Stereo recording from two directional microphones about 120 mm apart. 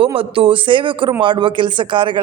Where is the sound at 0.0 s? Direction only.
50° right (ahead or behind).